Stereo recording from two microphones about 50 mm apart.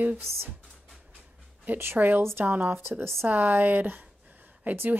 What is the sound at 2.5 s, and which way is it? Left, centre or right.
Speech, right.